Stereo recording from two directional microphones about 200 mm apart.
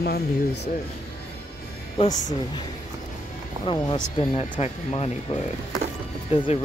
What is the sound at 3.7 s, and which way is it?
Speech, 25° left (ahead or behind).